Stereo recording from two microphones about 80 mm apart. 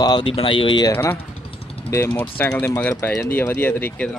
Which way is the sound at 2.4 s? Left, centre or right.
Centre.